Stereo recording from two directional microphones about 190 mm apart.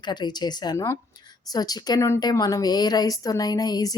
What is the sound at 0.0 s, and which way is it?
A woman's voice, 25° left (ahead or behind).